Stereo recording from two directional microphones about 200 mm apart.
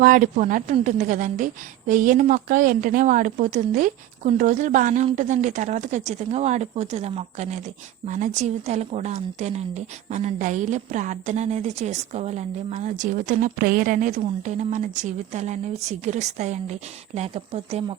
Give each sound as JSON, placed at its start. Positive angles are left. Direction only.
{"t": 0.0, "sound": "a woman's voice", "side_deg": -40}